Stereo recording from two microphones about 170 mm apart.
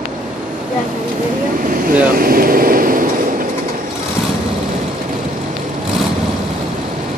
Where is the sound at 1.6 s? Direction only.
55° right (ahead or behind).